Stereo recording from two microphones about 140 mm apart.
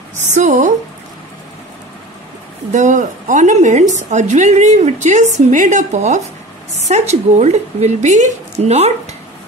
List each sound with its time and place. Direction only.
0.3 s a woman's voice: 60° right (ahead or behind)
2.7 s a woman's voice: 60° right (ahead or behind)